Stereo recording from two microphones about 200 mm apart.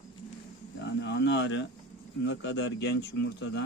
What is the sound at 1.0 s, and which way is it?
Speech, 60° left (ahead or behind).